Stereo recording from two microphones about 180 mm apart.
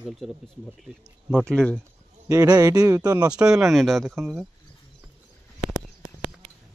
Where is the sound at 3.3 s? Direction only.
5° right (ahead or behind).